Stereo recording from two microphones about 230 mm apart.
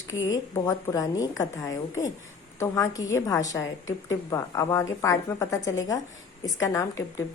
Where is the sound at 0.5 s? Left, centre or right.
Centre.